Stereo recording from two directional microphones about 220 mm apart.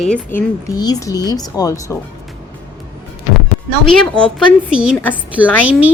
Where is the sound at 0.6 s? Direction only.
15° left (ahead or behind).